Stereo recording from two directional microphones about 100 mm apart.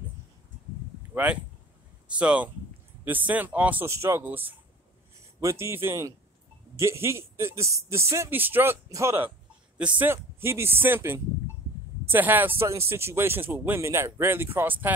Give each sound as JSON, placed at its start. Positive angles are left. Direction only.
{"t": 1.1, "sound": "speech", "side_deg": -15}
{"t": 3.9, "sound": "speech", "side_deg": -25}
{"t": 5.4, "sound": "speech", "side_deg": -30}
{"t": 8.8, "sound": "speech", "side_deg": -30}
{"t": 9.8, "sound": "speech", "side_deg": -15}
{"t": 10.1, "sound": "speech", "side_deg": -25}